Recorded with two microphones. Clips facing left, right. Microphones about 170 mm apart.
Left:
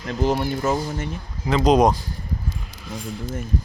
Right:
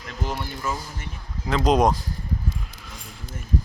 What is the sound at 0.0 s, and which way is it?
Speech, 45° left (ahead or behind).